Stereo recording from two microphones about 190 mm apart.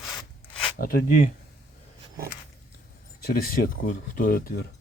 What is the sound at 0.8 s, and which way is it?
Speech, 55° left (ahead or behind).